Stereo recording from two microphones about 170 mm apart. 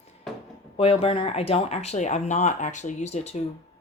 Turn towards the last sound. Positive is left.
turn(degrees=40)  # may be behind; listen again after turning